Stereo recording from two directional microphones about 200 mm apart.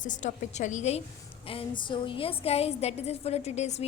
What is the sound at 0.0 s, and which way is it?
A woman's voice, 40° left (ahead or behind).